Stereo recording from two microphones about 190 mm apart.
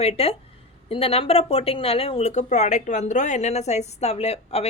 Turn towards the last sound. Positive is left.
turn(degrees=35)  # may be behind; listen again after turning